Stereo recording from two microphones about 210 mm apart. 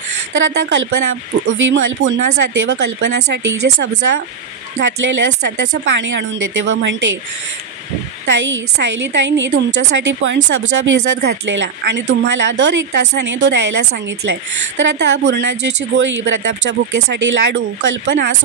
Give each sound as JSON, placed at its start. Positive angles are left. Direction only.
{"t": 0.3, "sound": "speech", "side_deg": -60}
{"t": 4.7, "sound": "speech", "side_deg": -60}
{"t": 8.3, "sound": "speech", "side_deg": -60}